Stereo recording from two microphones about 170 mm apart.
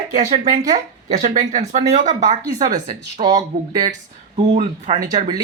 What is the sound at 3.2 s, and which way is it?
Speech, 20° right (ahead or behind).